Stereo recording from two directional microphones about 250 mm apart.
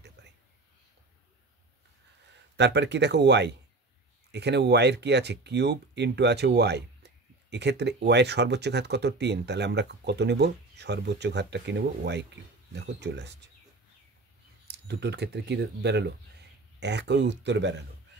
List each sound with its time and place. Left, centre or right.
0.2 s a sound: right
2.5 s speech: right
14.9 s speech: right